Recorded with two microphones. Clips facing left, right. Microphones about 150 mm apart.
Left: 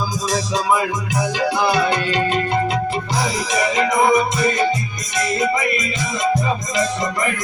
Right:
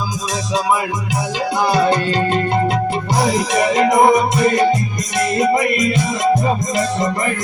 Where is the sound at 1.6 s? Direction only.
35° right (ahead or behind).